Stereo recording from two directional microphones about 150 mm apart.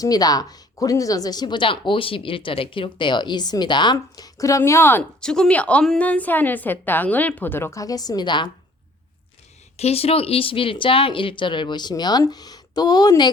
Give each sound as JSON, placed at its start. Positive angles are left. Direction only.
{"t": 0.0, "sound": "speech", "side_deg": 25}
{"t": 9.7, "sound": "speech", "side_deg": 45}